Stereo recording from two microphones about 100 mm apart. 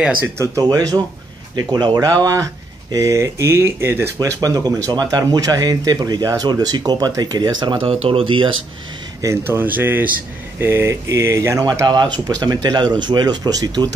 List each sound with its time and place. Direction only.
0.0 s speech: 15° right (ahead or behind)
0.6 s speech: 35° right (ahead or behind)
4.4 s speech: 35° right (ahead or behind); by 7.9 s 55° right (ahead or behind)
7.9 s speech: 80° right; by 8.5 s 60° right (ahead or behind)
9.2 s speech: 25° right (ahead or behind)
11.8 s speech: 45° right (ahead or behind)